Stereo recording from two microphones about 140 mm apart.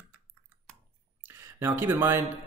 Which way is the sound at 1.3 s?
20° right (ahead or behind).